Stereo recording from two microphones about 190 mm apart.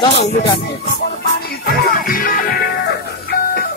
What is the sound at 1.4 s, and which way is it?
Music, 50° left (ahead or behind).